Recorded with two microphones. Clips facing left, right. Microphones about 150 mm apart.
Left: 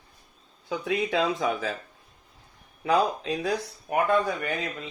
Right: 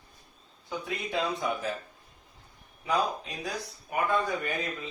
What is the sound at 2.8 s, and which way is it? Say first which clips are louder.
Speech: left 5 dB; 90° left.